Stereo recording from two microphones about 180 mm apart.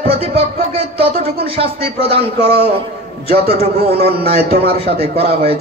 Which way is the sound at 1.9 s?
35° left (ahead or behind).